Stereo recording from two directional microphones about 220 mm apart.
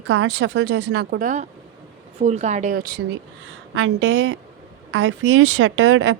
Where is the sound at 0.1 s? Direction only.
55° right (ahead or behind).